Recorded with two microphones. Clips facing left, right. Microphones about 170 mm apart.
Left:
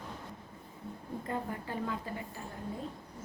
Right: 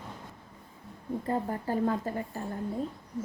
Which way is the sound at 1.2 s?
35° right (ahead or behind).